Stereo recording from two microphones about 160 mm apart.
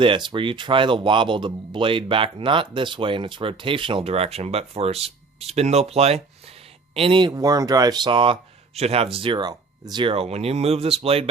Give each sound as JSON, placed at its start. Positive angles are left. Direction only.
{"t": 0.0, "sound": "speech", "side_deg": -30}